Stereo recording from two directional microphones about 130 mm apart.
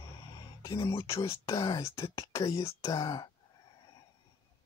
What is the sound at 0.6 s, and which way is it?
Speech, 25° left (ahead or behind).